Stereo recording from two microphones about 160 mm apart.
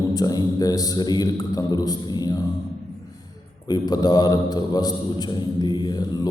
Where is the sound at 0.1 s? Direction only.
25° left (ahead or behind).